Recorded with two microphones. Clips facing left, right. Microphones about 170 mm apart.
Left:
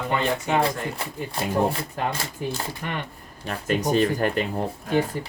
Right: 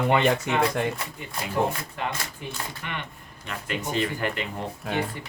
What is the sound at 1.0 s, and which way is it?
Speech, 35° left (ahead or behind).